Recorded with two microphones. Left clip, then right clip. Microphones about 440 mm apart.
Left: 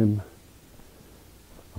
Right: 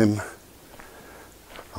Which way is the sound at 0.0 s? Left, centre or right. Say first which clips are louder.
Right 5 dB; centre.